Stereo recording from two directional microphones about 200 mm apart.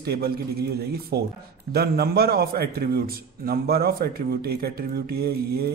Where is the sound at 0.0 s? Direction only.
50° right (ahead or behind).